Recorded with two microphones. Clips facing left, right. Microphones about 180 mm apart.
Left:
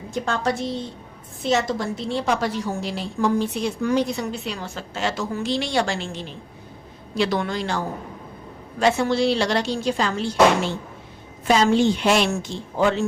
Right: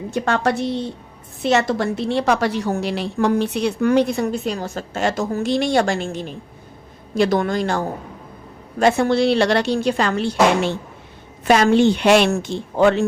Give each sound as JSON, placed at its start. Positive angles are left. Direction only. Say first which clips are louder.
{"t": 0.1, "sound": "a woman's voice", "louder": "right 4 dB", "side_deg": -70}
{"t": 8.8, "sound": "a woman's voice", "louder": "right 3 dB", "side_deg": -55}